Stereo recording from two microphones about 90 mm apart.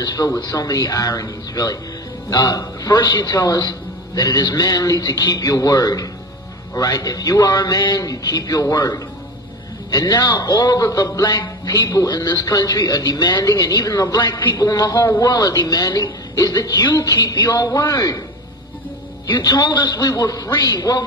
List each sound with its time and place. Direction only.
0.0 s a man's voice: 45° left (ahead or behind)
19.4 s a man's voice: 45° left (ahead or behind)